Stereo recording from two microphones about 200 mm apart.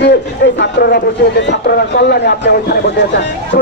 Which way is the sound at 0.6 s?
50° left (ahead or behind).